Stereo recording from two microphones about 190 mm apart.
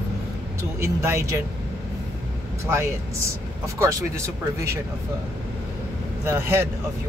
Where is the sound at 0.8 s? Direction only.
15° right (ahead or behind).